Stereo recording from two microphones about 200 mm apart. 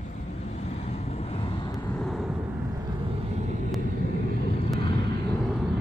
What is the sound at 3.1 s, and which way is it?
Vehicle, 35° right (ahead or behind).